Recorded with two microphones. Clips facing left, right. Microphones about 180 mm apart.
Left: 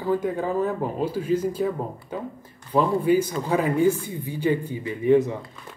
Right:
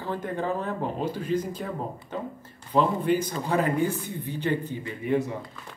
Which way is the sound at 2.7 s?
10° left (ahead or behind).